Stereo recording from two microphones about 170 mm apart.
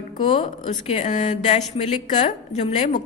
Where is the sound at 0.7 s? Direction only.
45° left (ahead or behind).